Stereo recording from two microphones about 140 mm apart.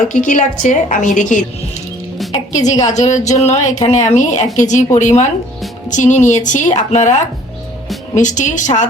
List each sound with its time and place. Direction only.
0.6 s a woman's voice: 65° left (ahead or behind)